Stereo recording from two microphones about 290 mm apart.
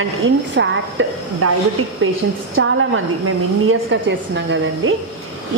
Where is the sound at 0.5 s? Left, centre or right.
Right.